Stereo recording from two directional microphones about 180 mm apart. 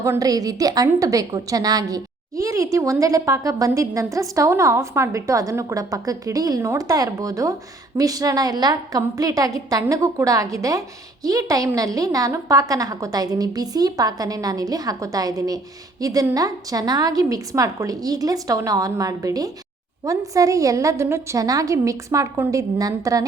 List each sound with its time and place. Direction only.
0.0 s a woman's voice: 20° right (ahead or behind)